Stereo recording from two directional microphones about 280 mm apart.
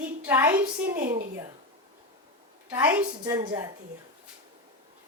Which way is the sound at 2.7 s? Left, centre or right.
Centre.